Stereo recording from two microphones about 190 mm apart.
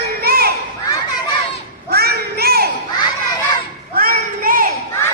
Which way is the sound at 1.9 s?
55° right (ahead or behind).